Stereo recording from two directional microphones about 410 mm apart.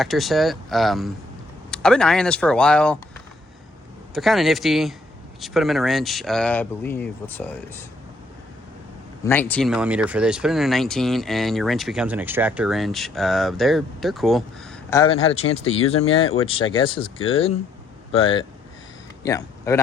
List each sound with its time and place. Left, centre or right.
0.0 s speech: centre
4.1 s speech: centre
9.2 s speech: centre